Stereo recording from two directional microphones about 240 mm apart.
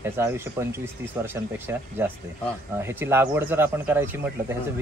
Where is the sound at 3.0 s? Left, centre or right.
Centre.